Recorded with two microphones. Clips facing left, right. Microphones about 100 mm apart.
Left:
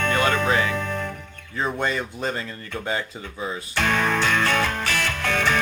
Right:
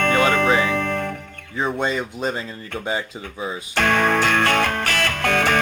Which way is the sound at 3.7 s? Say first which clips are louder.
Right 4 dB; 55° right (ahead or behind).